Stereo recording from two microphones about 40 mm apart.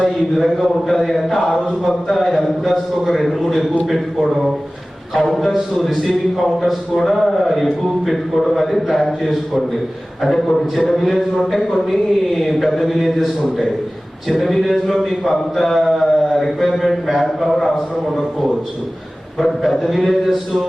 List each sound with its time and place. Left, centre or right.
0.3 s speech: centre
19.4 s a man's voice: centre